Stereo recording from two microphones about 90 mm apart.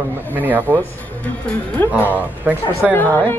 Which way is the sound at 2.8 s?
5° right (ahead or behind).